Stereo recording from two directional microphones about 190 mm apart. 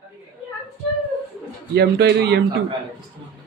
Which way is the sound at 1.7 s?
60° right (ahead or behind).